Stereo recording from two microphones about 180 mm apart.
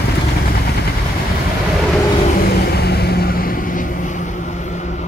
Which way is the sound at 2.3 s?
60° left (ahead or behind).